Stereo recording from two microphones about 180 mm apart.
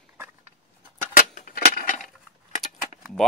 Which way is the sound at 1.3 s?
50° left (ahead or behind).